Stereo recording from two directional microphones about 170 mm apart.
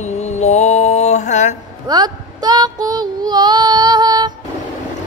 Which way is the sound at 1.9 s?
25° right (ahead or behind).